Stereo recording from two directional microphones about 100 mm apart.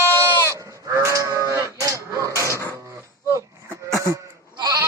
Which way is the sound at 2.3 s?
30° left (ahead or behind).